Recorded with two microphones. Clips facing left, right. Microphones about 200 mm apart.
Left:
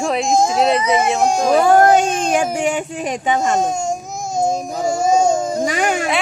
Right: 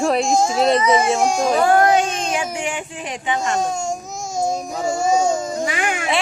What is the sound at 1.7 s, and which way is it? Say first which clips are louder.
Child singing: left 3 dB; 45° left (ahead or behind).